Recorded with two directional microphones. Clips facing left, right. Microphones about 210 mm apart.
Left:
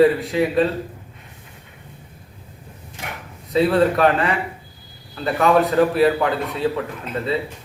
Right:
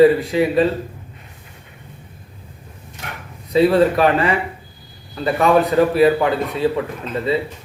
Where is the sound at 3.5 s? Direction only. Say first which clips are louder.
Right 3 dB; 5° right (ahead or behind).